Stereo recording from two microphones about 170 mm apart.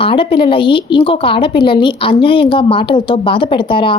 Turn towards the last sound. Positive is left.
turn(degrees=30)  # may be behind; listen again after turning